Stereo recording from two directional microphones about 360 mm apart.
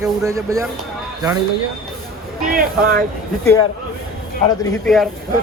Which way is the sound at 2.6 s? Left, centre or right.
Right.